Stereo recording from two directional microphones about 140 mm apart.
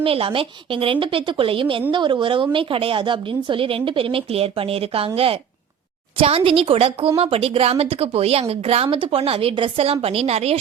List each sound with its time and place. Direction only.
0.0 s a woman's voice: 40° right (ahead or behind)